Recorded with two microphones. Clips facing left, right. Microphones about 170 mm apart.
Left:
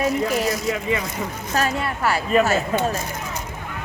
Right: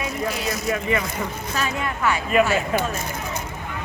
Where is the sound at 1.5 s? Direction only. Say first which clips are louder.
Left 4 dB; 40° left (ahead or behind).